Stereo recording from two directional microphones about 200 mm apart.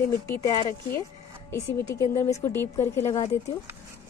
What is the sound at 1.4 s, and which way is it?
Speech, 15° left (ahead or behind).